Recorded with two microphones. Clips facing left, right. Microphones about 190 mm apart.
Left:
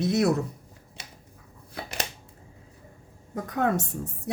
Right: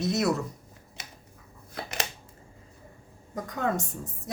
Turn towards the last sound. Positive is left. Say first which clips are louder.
# left 4 dB
turn(degrees=65)  # may be behind; listen again after turning